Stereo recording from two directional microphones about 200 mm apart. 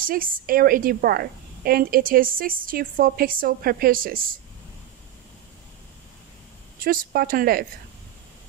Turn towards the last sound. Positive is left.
turn(degrees=-45)  # may be behind; listen again after turning